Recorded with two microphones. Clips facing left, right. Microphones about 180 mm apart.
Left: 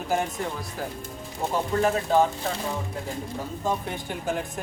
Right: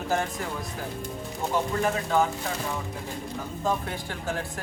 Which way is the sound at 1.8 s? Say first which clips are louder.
Left 5 dB; 30° left (ahead or behind).